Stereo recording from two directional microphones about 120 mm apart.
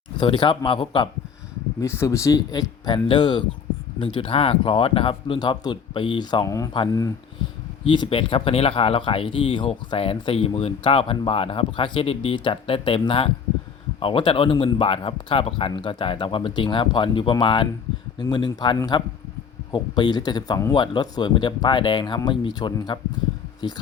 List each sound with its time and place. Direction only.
0.2 s speech: 40° left (ahead or behind)
1.8 s speech: 25° left (ahead or behind)
7.9 s speech: 40° left (ahead or behind)